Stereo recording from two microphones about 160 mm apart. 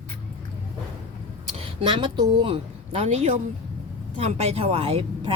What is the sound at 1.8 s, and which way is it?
Speech, 30° right (ahead or behind).